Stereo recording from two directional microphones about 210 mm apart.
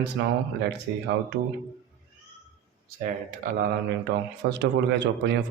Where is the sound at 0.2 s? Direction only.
55° right (ahead or behind).